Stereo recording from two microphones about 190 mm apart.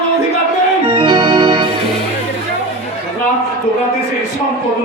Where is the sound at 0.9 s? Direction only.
30° right (ahead or behind).